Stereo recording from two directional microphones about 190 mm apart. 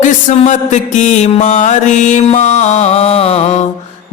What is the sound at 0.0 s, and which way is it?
Mantra, 40° left (ahead or behind).